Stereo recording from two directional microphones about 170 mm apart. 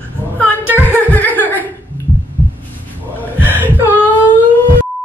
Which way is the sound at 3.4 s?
10° right (ahead or behind).